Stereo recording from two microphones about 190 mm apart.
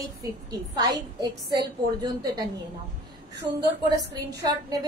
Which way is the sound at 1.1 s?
20° right (ahead or behind).